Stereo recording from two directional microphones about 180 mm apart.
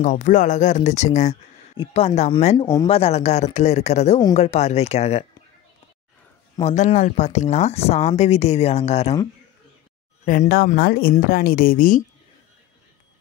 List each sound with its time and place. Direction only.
0.0 s speech: 45° left (ahead or behind)
2.5 s speech: 20° left (ahead or behind)
2.9 s speech: 35° left (ahead or behind)
6.6 s speech: 40° left (ahead or behind)
10.2 s a woman's voice: 50° left (ahead or behind)